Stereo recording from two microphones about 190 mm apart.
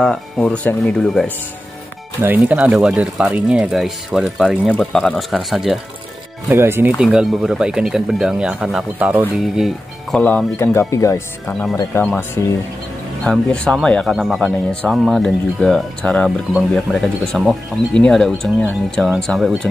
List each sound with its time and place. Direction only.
0.0 s speech: 5° left (ahead or behind)
2.2 s speech: 10° right (ahead or behind)
6.5 s speech: 10° right (ahead or behind)
10.1 s speech: 10° left (ahead or behind)
13.2 s speech: 5° left (ahead or behind)